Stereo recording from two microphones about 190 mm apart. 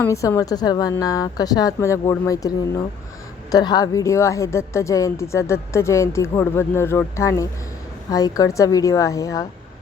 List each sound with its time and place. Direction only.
0.0 s a woman's voice: 15° left (ahead or behind)